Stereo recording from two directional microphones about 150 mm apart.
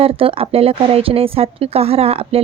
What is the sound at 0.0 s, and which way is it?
A woman's voice, 40° right (ahead or behind).